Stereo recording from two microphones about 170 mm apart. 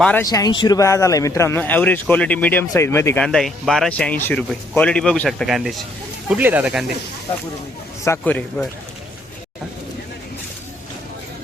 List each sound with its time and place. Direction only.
0.0 s speech: 10° left (ahead or behind)
0.3 s speech: 20° left (ahead or behind)
3.2 s speech: centre (ahead or behind)
8.0 s speech: 10° left (ahead or behind)